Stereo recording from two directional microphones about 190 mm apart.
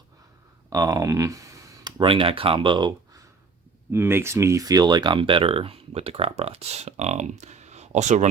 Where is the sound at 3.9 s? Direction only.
10° right (ahead or behind); by 8.3 s 40° right (ahead or behind).